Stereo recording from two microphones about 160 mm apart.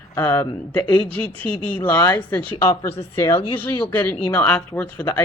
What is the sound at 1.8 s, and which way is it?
Speech, 20° left (ahead or behind).